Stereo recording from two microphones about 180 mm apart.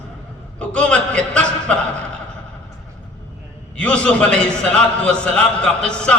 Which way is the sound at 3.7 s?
5° left (ahead or behind).